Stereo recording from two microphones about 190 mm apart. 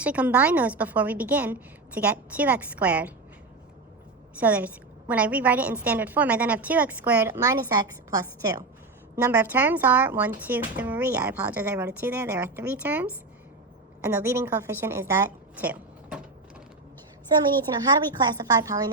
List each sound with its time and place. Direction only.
0.0 s a woman's voice: 5° right (ahead or behind)
4.4 s a woman's voice: 10° right (ahead or behind)
17.8 s a woman's voice: 20° right (ahead or behind)